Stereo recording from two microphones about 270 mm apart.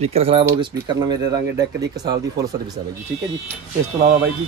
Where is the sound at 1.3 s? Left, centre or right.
Right.